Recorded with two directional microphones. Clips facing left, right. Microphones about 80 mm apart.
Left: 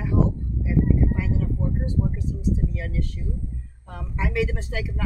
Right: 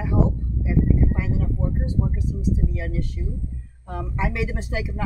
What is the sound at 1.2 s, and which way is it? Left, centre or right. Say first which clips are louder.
Speech: right 1 dB; centre.